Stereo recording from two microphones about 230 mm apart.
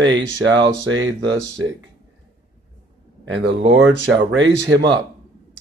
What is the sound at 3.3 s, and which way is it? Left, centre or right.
Speech, right.